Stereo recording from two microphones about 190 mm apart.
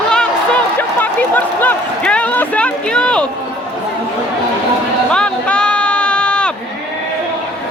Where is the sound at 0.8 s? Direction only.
10° left (ahead or behind).